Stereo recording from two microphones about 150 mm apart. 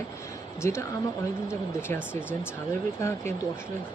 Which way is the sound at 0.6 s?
20° left (ahead or behind).